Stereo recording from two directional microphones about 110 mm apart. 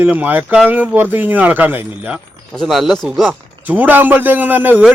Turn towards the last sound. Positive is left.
turn(degrees=-15)  # may be behind; listen again after turning